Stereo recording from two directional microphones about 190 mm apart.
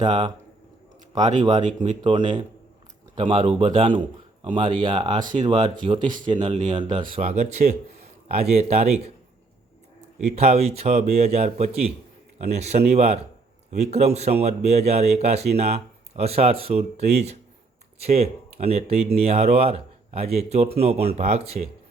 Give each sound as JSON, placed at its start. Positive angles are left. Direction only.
{"t": 0.1, "sound": "speech", "side_deg": -30}
{"t": 1.5, "sound": "speech", "side_deg": -25}
{"t": 10.3, "sound": "speech", "side_deg": -35}